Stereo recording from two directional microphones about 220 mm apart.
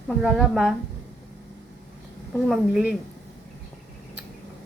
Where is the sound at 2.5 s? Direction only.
Centre (ahead or behind).